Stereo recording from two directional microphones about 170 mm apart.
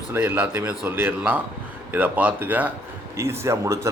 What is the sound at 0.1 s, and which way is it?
A man's voice, 10° right (ahead or behind).